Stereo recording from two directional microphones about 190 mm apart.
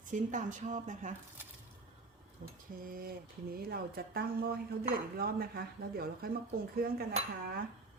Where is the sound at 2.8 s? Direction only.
50° right (ahead or behind).